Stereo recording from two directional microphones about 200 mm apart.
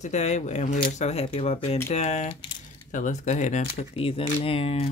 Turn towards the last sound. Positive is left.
turn(degrees=30)  # may be behind; listen again after turning